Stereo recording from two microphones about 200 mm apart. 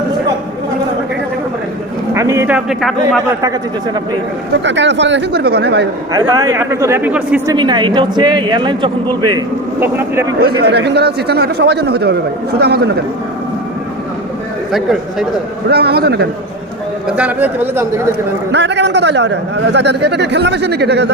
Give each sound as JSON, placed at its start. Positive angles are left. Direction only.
{"t": 2.1, "sound": "a man's voice", "side_deg": -15}
{"t": 4.5, "sound": "a man's voice", "side_deg": -65}
{"t": 6.1, "sound": "speech", "side_deg": -20}
{"t": 7.4, "sound": "speech", "side_deg": -20}
{"t": 10.4, "sound": "a man's voice", "side_deg": -55}
{"t": 14.7, "sound": "speech", "side_deg": 0}
{"t": 15.7, "sound": "a man's voice", "side_deg": -55}
{"t": 17.1, "sound": "speech", "side_deg": -5}
{"t": 18.5, "sound": "a man's voice", "side_deg": -60}